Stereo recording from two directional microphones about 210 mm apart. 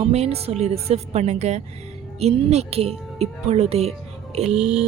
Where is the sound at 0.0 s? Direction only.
30° right (ahead or behind).